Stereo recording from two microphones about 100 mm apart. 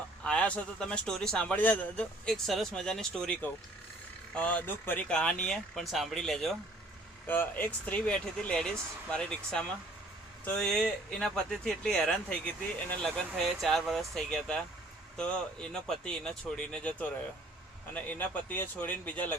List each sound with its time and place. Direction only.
0.3 s a man's voice: 10° left (ahead or behind)
4.4 s a man's voice: 15° left (ahead or behind)
7.3 s a man's voice: 20° left (ahead or behind)